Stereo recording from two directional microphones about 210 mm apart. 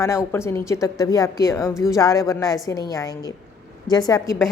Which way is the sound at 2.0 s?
15° left (ahead or behind).